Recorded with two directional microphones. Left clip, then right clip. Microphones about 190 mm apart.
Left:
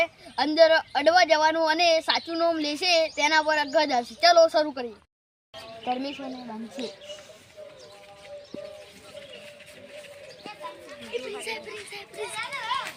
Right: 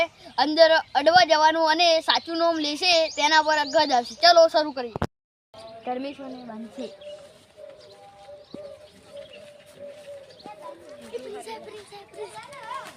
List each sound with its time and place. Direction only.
0.0 s speech: 10° left (ahead or behind)
5.8 s speech: centre (ahead or behind)
11.0 s a sound: 25° right (ahead or behind)